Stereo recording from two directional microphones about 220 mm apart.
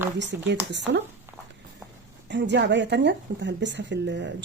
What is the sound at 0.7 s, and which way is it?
Speech, 55° right (ahead or behind).